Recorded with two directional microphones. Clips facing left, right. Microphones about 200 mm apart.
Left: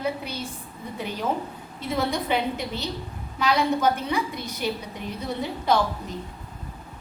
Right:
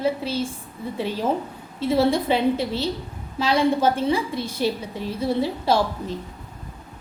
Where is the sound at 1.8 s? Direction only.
30° right (ahead or behind).